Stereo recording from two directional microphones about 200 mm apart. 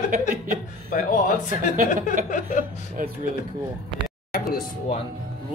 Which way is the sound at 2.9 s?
45° right (ahead or behind).